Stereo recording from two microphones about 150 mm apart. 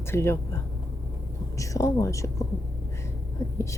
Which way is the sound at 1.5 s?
20° left (ahead or behind).